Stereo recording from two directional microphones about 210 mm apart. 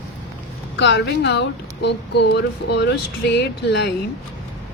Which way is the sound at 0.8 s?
55° left (ahead or behind).